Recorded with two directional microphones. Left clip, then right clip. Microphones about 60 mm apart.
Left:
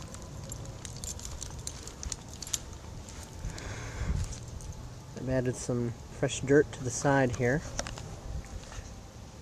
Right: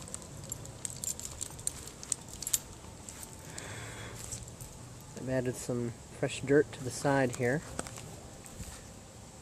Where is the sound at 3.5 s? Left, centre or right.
Centre.